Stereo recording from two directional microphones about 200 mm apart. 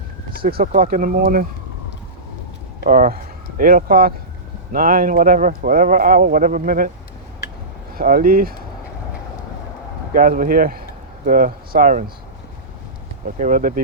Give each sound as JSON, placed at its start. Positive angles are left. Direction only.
{"t": 0.3, "sound": "speech", "side_deg": -45}
{"t": 2.8, "sound": "speech", "side_deg": -45}
{"t": 7.9, "sound": "speech", "side_deg": -45}
{"t": 10.2, "sound": "speech", "side_deg": -45}
{"t": 13.4, "sound": "speech", "side_deg": -45}